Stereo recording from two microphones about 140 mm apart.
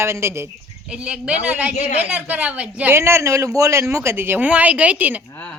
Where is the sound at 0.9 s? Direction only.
5° right (ahead or behind).